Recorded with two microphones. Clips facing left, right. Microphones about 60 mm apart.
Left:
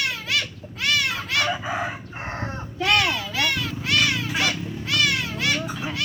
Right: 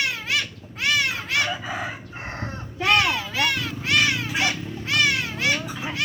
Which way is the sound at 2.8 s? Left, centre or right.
Right.